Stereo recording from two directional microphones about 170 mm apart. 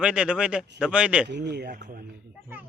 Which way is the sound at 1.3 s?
90° right.